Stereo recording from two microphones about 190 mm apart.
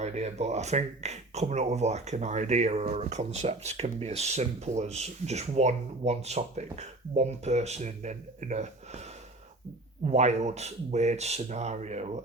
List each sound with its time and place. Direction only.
0.0 s speech: 35° right (ahead or behind)
10.1 s speech: 35° right (ahead or behind)